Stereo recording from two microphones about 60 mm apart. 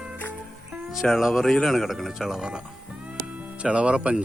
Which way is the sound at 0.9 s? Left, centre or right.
Centre.